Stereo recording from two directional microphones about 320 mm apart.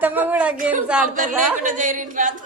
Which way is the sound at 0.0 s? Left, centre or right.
Centre.